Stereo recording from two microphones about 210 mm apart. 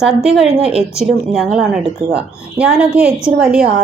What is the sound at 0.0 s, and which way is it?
A woman's voice, centre (ahead or behind).